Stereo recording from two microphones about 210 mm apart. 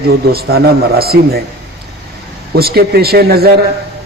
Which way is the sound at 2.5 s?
45° right (ahead or behind).